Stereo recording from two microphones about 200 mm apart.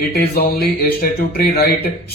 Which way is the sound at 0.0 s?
50° left (ahead or behind).